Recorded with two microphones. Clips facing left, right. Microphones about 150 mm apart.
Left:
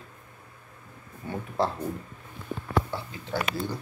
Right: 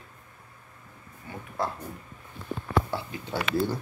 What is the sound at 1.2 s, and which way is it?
Speech, 30° left (ahead or behind).